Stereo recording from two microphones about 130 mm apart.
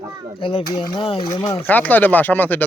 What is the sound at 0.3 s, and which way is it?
Speech, 40° left (ahead or behind).